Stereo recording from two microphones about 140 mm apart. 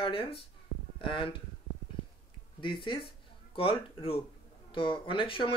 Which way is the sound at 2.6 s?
35° left (ahead or behind).